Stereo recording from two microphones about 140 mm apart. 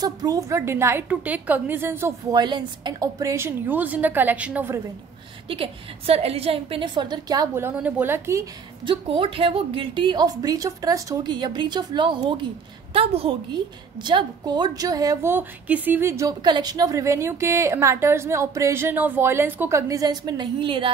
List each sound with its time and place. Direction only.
0.0 s a woman's voice: 25° right (ahead or behind)
2.3 s a woman's voice: 30° right (ahead or behind); by 4.8 s 15° right (ahead or behind)
5.5 s a woman's voice: 45° right (ahead or behind)
7.7 s a woman's voice: 10° right (ahead or behind)
8.8 s a woman's voice: 40° right (ahead or behind)
15.3 s a woman's voice: 10° right (ahead or behind)
16.4 s a woman's voice: 30° right (ahead or behind)